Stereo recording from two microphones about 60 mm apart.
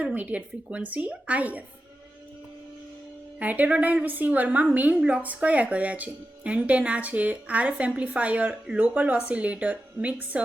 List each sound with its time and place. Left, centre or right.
0.0 s speech: right
3.3 s speech: right
4.9 s a woman's voice: centre